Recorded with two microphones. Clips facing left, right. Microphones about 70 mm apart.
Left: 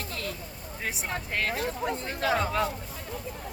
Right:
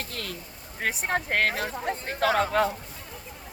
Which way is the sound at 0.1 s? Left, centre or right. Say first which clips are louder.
Left 1 dB; right.